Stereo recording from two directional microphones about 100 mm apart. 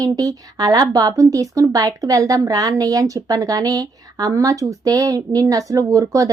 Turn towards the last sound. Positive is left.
turn(degrees=-35)  # may be behind; listen again after turning